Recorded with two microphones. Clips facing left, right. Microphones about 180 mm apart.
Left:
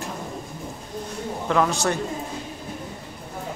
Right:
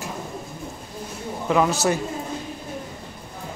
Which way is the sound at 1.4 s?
5° right (ahead or behind).